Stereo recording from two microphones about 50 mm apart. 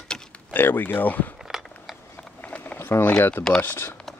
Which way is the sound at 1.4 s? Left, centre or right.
Centre.